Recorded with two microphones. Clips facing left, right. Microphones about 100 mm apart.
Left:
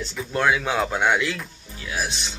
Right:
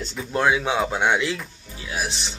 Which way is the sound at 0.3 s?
20° right (ahead or behind).